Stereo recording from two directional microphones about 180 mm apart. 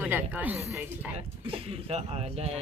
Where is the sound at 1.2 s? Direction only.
30° right (ahead or behind).